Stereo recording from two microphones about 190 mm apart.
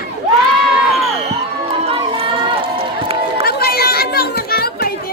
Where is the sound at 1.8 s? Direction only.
30° right (ahead or behind).